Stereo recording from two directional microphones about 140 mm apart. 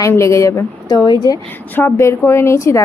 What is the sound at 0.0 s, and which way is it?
A woman's voice, 20° left (ahead or behind).